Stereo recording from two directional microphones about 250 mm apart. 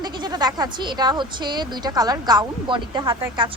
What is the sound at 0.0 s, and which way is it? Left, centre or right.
Speech, centre.